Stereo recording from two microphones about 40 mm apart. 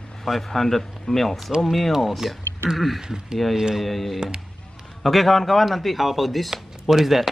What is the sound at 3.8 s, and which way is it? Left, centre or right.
Speech, centre.